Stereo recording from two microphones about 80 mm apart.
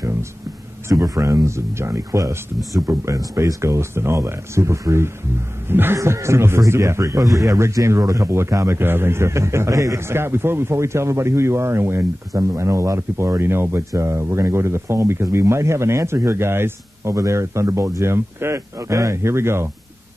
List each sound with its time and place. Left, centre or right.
0.8 s speech: right